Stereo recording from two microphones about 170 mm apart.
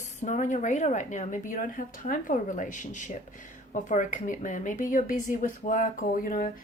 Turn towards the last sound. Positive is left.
turn(degrees=55)  # may be behind; listen again after turning